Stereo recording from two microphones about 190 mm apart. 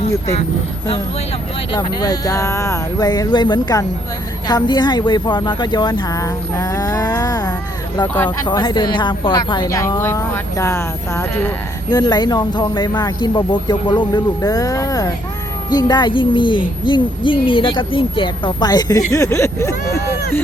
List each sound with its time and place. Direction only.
1.7 s a woman's voice: 20° left (ahead or behind)
8.4 s a woman's voice: 20° left (ahead or behind)